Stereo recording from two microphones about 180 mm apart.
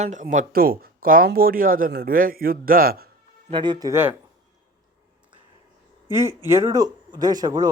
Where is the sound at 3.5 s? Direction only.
25° right (ahead or behind).